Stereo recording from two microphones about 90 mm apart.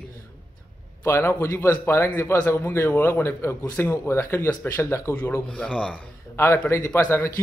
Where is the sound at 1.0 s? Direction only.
30° left (ahead or behind).